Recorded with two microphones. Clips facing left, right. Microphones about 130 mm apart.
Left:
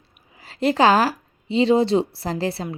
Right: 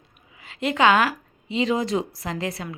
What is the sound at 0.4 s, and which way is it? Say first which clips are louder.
A woman's voice: left 3 dB; 35° left (ahead or behind).